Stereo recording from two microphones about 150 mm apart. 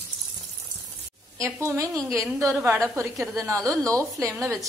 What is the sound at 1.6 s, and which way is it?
A woman's voice, 20° right (ahead or behind).